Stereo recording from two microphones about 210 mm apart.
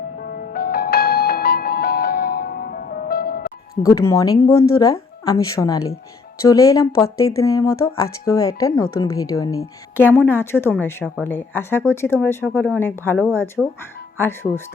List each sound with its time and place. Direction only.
0.5 s music: 50° left (ahead or behind)
3.8 s speech: 15° left (ahead or behind)
13.6 s speech: 5° right (ahead or behind)
14.2 s speech: 10° left (ahead or behind)